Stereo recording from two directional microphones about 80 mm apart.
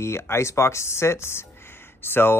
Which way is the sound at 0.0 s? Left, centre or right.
Left.